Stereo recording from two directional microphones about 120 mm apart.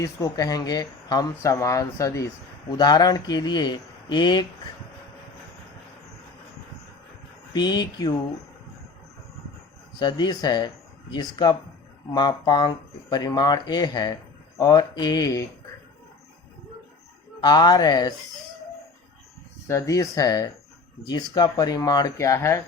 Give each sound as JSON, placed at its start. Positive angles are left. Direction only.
{"t": 0.2, "sound": "speech", "side_deg": 30}
{"t": 1.4, "sound": "speech", "side_deg": 25}
{"t": 7.5, "sound": "speech", "side_deg": 35}
{"t": 10.0, "sound": "speech", "side_deg": 40}
{"t": 17.4, "sound": "speech", "side_deg": 35}
{"t": 19.6, "sound": "speech", "side_deg": 25}